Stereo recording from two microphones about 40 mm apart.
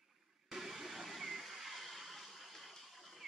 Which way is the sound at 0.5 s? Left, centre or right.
Centre.